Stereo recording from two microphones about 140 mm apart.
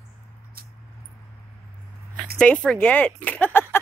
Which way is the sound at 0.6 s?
90° right.